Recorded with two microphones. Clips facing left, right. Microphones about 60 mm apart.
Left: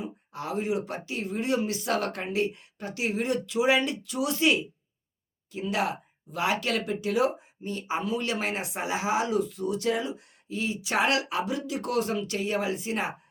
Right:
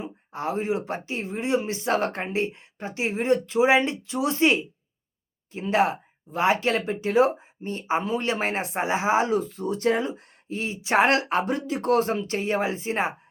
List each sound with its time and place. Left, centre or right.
0.0 s speech: right